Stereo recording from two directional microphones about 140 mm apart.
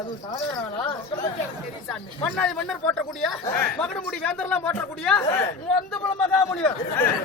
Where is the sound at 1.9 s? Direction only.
5° left (ahead or behind).